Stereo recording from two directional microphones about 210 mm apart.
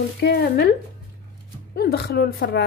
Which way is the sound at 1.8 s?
50° left (ahead or behind).